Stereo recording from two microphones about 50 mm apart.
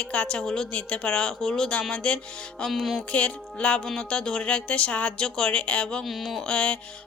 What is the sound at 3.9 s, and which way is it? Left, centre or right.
Speech, centre.